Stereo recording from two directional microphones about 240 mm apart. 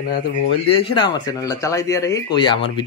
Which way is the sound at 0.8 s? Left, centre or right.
Centre.